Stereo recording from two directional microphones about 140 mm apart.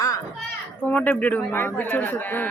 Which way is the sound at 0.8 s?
10° left (ahead or behind).